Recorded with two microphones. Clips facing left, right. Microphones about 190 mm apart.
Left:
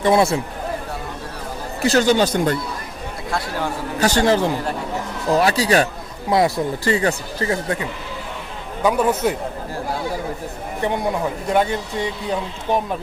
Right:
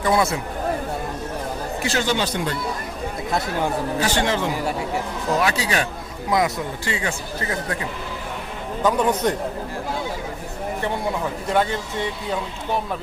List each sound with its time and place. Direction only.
0.0 s speech: 25° left (ahead or behind)
1.8 s speech: 40° left (ahead or behind)
3.2 s speech: 20° right (ahead or behind)
4.0 s speech: 40° left (ahead or behind)
8.8 s speech: 10° left (ahead or behind)
11.4 s speech: 15° left (ahead or behind)